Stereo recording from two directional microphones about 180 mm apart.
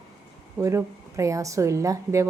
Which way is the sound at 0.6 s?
15° right (ahead or behind).